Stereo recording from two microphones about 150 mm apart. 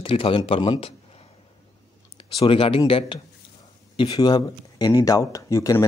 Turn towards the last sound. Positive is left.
turn(degrees=20)  # may be behind; listen again after turning